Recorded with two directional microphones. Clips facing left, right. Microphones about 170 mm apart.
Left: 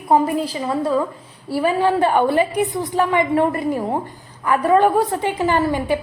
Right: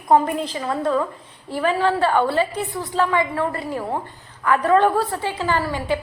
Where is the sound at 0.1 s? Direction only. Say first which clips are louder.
Left 1 dB; 5° left (ahead or behind).